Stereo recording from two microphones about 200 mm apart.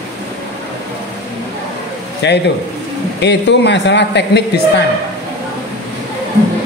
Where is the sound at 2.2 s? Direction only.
60° left (ahead or behind).